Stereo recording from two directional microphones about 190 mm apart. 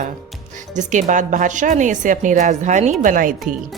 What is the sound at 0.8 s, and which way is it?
A woman's voice, 40° right (ahead or behind).